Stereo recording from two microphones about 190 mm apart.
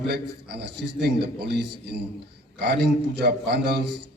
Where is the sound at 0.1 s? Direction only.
60° right (ahead or behind).